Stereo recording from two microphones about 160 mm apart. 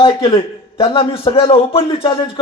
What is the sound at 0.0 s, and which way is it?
A man's voice, 35° left (ahead or behind).